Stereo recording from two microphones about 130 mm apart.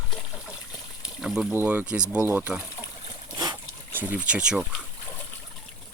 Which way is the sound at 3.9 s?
10° right (ahead or behind).